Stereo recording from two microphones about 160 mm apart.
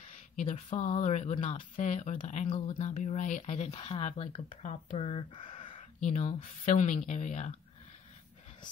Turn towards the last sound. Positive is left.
turn(degrees=50)  # may be behind; listen again after turning